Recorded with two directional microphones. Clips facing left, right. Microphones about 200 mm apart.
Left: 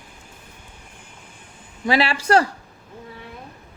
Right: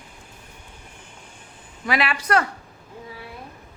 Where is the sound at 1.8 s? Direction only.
30° left (ahead or behind).